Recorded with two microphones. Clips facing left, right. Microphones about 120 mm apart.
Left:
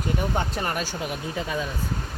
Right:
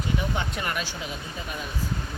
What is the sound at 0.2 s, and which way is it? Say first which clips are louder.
Speech: left 3 dB; 40° left (ahead or behind).